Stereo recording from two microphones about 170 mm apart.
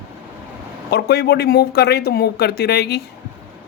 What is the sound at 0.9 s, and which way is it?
Speech, 70° left (ahead or behind).